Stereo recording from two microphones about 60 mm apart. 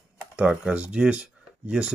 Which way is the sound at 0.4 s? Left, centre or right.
Right.